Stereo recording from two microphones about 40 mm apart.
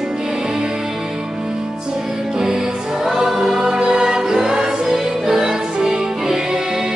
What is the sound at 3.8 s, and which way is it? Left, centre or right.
Music, right.